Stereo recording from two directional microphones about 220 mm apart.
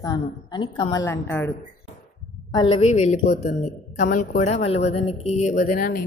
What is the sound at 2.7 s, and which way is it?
Speech, 30° left (ahead or behind).